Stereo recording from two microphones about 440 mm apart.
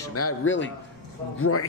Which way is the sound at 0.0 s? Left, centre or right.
Left.